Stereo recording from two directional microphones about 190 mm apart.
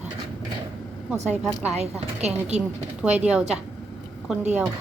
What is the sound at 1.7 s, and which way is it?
Speech, 35° right (ahead or behind).